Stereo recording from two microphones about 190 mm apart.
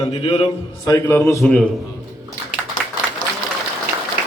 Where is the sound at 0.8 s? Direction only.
15° left (ahead or behind).